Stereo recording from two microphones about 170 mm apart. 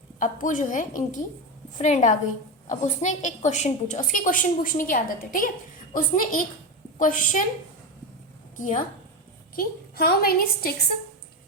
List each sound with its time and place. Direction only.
0.2 s a woman's voice: 50° left (ahead or behind)
8.5 s a woman's voice: 50° left (ahead or behind)
9.6 s a woman's voice: 65° left (ahead or behind)